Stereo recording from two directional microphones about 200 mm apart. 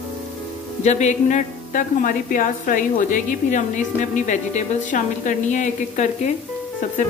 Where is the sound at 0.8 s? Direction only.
35° left (ahead or behind).